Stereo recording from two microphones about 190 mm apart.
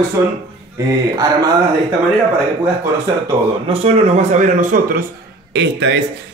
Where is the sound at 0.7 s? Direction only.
20° right (ahead or behind).